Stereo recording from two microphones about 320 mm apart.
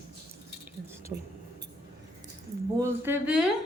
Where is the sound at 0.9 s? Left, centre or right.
Centre.